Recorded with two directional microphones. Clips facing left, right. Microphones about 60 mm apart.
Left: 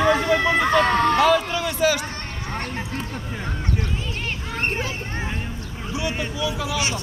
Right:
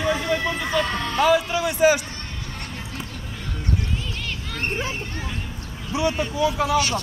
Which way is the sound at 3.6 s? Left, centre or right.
Left.